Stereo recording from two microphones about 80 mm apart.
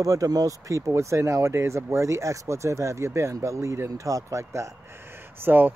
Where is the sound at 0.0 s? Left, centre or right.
Right.